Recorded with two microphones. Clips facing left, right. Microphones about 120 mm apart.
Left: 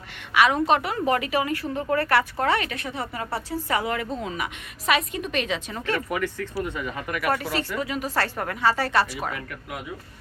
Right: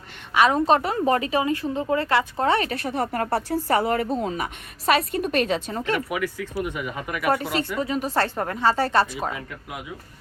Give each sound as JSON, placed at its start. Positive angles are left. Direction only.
{"t": 0.3, "sound": "a woman's voice", "side_deg": -30}
{"t": 6.1, "sound": "speech", "side_deg": -10}